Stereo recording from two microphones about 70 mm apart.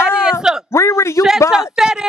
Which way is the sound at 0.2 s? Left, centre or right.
Centre.